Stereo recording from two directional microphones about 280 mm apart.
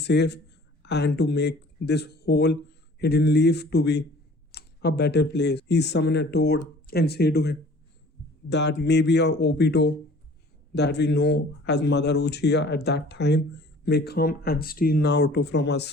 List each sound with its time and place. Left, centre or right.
0.0 s a man's voice: left